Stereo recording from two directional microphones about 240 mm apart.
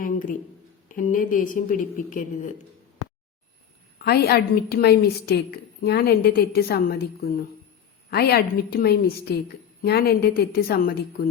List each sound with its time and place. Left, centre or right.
0.0 s a woman's voice: left
3.9 s a woman's voice: left